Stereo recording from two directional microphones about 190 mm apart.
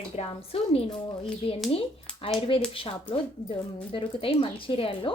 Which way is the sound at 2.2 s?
30° left (ahead or behind).